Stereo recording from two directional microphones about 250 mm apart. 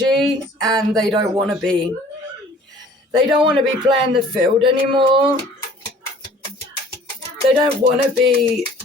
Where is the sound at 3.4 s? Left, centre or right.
Centre.